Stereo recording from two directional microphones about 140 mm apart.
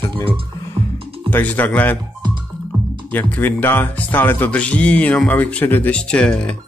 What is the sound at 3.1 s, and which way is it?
Speech, 15° left (ahead or behind).